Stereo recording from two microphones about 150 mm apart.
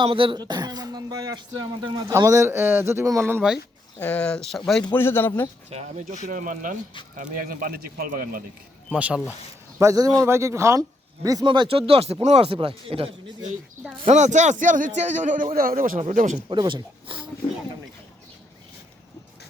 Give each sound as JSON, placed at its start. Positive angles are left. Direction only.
{"t": 0.0, "sound": "speech", "side_deg": -35}
{"t": 3.9, "sound": "speech", "side_deg": 10}
{"t": 4.9, "sound": "speech", "side_deg": 15}
{"t": 5.7, "sound": "speech", "side_deg": -50}
{"t": 6.2, "sound": "a man's voice", "side_deg": -65}
{"t": 8.9, "sound": "speech", "side_deg": -10}
{"t": 9.7, "sound": "speech", "side_deg": -20}
{"t": 14.1, "sound": "a man's voice", "side_deg": -55}
{"t": 16.0, "sound": "a man's voice", "side_deg": -55}
{"t": 16.5, "sound": "speech", "side_deg": -35}